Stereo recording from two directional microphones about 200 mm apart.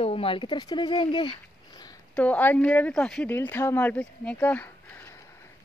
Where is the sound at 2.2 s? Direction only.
10° left (ahead or behind).